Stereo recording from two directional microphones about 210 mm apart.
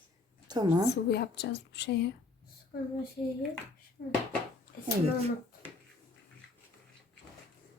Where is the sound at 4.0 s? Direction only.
40° left (ahead or behind).